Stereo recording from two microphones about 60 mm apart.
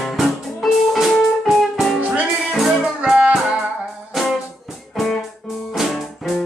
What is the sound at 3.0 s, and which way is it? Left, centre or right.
Music, centre.